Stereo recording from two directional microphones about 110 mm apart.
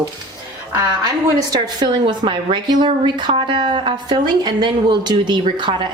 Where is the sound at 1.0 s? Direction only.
40° right (ahead or behind).